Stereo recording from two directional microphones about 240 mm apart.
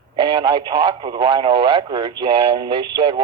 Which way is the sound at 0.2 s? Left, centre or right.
Right.